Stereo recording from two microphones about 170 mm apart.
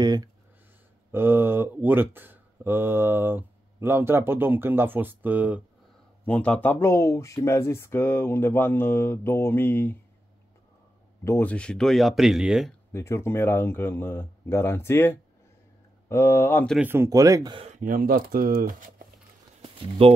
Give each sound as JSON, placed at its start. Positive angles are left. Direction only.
{"t": 0.0, "sound": "speech", "side_deg": -25}
{"t": 1.1, "sound": "speech", "side_deg": -10}
{"t": 6.2, "sound": "speech", "side_deg": 10}
{"t": 11.2, "sound": "speech", "side_deg": 10}
{"t": 12.9, "sound": "speech", "side_deg": 15}
{"t": 16.7, "sound": "speech", "side_deg": -10}
{"t": 17.6, "sound": "speech", "side_deg": -45}
{"t": 19.6, "sound": "a sound", "side_deg": -30}